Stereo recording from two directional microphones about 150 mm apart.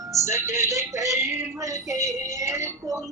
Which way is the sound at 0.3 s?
15° right (ahead or behind).